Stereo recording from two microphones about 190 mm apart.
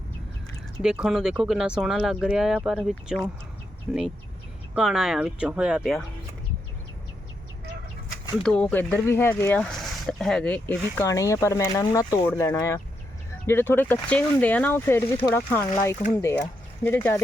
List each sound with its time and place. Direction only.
0.8 s speech: 5° right (ahead or behind)
8.4 s speech: 5° left (ahead or behind)